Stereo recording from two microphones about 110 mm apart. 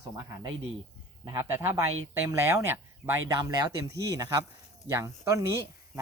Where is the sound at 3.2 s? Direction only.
35° right (ahead or behind).